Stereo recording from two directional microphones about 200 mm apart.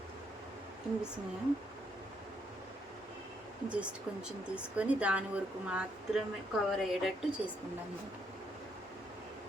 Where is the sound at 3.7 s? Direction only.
5° right (ahead or behind).